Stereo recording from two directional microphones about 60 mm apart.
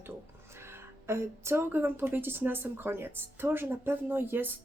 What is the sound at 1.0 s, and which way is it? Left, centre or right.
A woman's voice, right.